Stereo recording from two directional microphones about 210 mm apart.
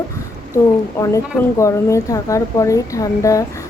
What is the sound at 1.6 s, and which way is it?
A woman's voice, 15° left (ahead or behind).